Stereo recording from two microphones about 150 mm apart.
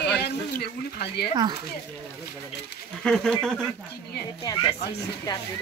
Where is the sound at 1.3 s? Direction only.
30° right (ahead or behind).